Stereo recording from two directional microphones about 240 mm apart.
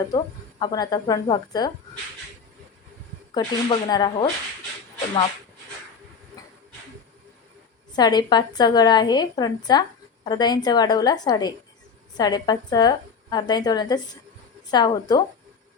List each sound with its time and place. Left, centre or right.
0.6 s a woman's voice: centre
3.3 s a woman's voice: centre
7.9 s a woman's voice: centre